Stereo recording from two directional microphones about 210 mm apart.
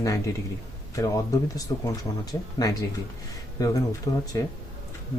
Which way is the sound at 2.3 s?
15° left (ahead or behind).